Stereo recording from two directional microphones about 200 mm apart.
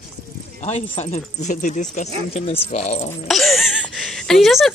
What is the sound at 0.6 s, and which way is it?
Speech, 35° left (ahead or behind).